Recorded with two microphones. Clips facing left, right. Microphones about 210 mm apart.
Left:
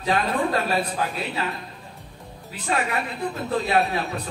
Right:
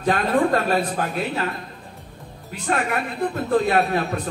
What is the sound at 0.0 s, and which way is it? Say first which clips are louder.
A man's voice: right 4 dB; 50° right (ahead or behind).